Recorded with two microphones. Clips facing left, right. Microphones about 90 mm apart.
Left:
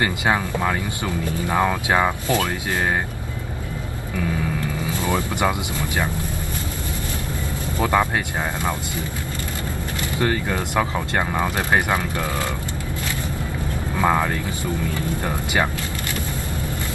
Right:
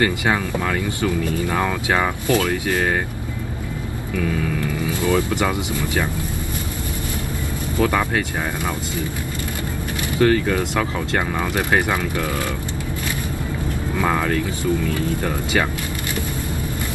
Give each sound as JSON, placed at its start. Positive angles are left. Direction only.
{"t": 0.0, "sound": "speech", "side_deg": 20}
{"t": 4.8, "sound": "speech", "side_deg": 20}
{"t": 7.8, "sound": "speech", "side_deg": 20}
{"t": 10.1, "sound": "speech", "side_deg": 20}
{"t": 14.0, "sound": "speech", "side_deg": 15}